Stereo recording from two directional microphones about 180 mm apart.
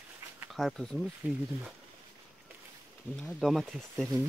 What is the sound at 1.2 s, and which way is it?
Speech, 10° right (ahead or behind).